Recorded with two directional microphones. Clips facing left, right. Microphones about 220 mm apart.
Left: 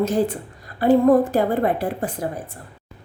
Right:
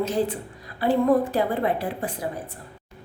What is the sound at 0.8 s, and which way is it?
A woman's voice, 45° left (ahead or behind).